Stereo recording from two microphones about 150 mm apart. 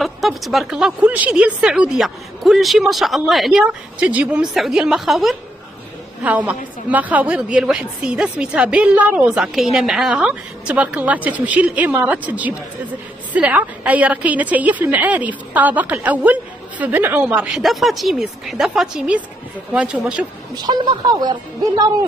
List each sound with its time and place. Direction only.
0.0 s a woman's voice: centre (ahead or behind)
20.5 s speech: 25° right (ahead or behind)